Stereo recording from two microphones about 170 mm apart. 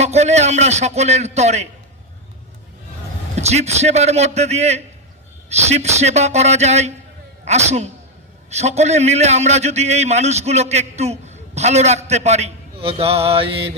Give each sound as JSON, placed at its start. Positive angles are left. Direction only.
{"t": 0.0, "sound": "a man's voice", "side_deg": -40}
{"t": 3.3, "sound": "a man's voice", "side_deg": -40}